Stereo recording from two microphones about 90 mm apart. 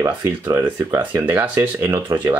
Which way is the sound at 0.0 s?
30° right (ahead or behind).